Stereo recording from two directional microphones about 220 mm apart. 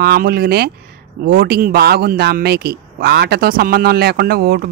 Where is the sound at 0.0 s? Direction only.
45° right (ahead or behind).